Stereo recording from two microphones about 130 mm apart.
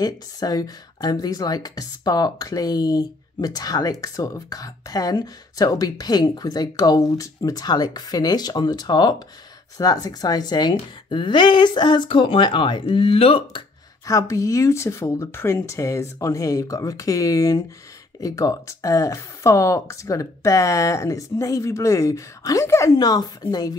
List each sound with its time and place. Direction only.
0.0 s a woman's voice: 30° left (ahead or behind)
14.0 s speech: 25° left (ahead or behind)